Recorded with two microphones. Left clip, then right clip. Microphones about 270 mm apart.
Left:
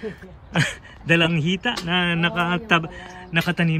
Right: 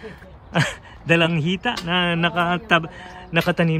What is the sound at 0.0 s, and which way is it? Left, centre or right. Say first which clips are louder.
Speech: left 4 dB; centre.